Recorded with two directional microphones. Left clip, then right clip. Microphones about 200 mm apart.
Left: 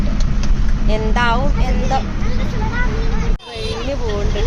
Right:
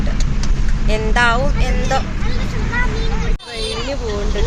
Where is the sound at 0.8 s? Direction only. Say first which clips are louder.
Right 2 dB; 5° right (ahead or behind).